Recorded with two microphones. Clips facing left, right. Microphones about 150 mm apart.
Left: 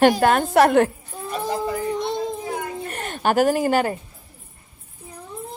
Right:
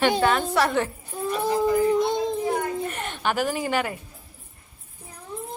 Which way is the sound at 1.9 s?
Centre (ahead or behind).